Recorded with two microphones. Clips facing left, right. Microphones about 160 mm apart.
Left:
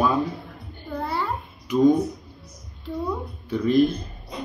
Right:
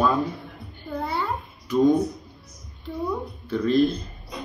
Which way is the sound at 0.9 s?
Centre (ahead or behind).